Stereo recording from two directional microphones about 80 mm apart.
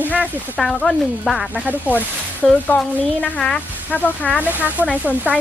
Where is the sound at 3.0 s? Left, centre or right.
Centre.